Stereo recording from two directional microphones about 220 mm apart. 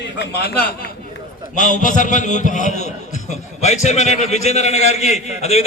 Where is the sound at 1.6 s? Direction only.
35° left (ahead or behind).